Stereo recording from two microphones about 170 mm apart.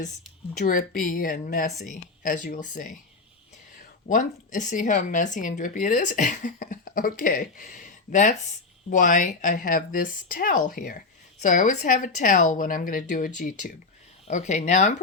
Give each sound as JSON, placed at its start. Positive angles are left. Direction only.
{"t": 0.6, "sound": "speech", "side_deg": 50}
{"t": 4.1, "sound": "speech", "side_deg": 50}